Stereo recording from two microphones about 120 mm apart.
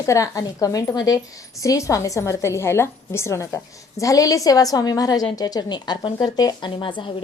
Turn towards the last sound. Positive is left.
turn(degrees=40)  # may be behind; listen again after turning